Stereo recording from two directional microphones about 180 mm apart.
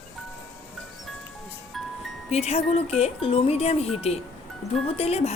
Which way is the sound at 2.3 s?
35° left (ahead or behind).